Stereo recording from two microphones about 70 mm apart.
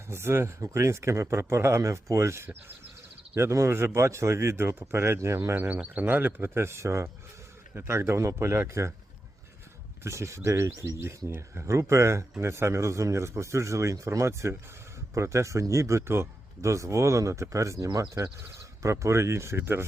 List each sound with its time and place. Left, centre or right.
0.1 s speech: right
5.5 s speech: right
10.0 s speech: right